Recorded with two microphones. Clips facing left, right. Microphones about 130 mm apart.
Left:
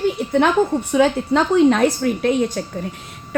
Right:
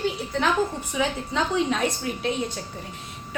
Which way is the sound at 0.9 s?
70° left (ahead or behind).